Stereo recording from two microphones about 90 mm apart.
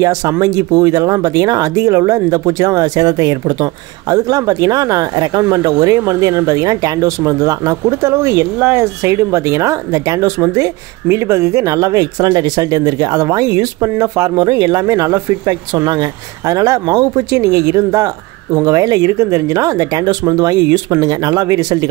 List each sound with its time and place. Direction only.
0.4 s speech: 40° right (ahead or behind)
14.3 s speech: 50° right (ahead or behind)